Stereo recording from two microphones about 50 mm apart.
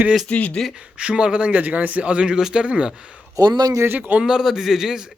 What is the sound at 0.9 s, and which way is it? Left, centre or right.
Speech, centre.